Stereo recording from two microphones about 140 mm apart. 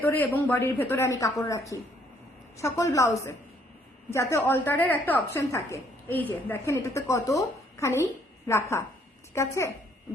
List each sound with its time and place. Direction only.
0.0 s a woman's voice: 15° left (ahead or behind)